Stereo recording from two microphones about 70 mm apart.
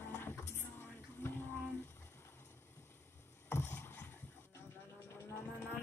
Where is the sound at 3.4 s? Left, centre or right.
Left.